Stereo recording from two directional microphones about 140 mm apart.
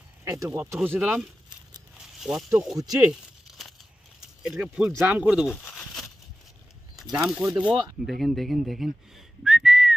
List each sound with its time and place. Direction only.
0.2 s speech: 20° right (ahead or behind)
2.1 s snake: 5° right (ahead or behind)
2.7 s speech: 25° right (ahead or behind)
3.1 s crumpling: centre (ahead or behind)
4.4 s speech: 5° right (ahead or behind)
5.7 s a sound: centre (ahead or behind)
7.2 s speech: 5° right (ahead or behind)
8.6 s whistling: centre (ahead or behind)